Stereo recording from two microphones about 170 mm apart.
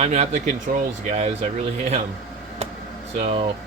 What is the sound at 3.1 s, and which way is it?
Speech, 35° right (ahead or behind).